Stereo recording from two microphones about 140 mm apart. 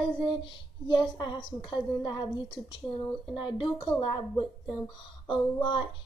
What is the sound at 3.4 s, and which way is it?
A woman's voice, 35° left (ahead or behind).